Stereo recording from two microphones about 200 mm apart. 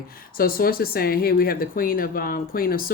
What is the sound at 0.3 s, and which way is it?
Speech, 45° left (ahead or behind).